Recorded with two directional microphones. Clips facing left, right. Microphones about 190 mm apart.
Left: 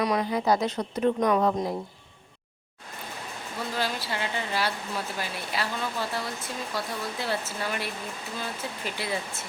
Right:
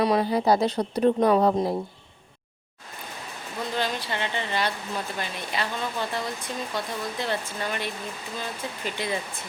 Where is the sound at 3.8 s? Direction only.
5° left (ahead or behind).